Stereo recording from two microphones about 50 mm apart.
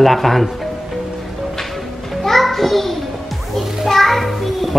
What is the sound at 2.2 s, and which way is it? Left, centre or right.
A child's voice, centre.